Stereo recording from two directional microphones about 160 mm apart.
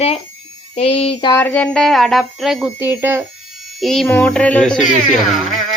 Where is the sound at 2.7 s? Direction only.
15° right (ahead or behind).